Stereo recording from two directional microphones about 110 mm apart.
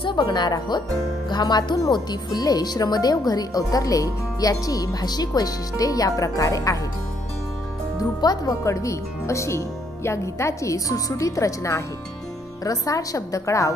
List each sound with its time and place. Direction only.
0.0 s a woman's voice: 45° left (ahead or behind)
8.2 s a woman's voice: 35° left (ahead or behind)